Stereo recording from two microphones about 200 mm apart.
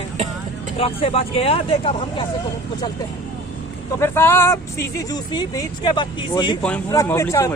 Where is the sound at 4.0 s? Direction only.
10° left (ahead or behind).